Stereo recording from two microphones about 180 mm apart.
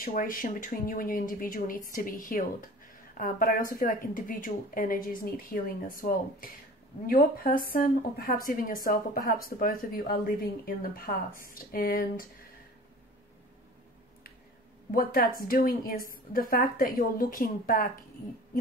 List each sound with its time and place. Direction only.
0.0 s speech: 50° left (ahead or behind)
14.9 s speech: 55° left (ahead or behind)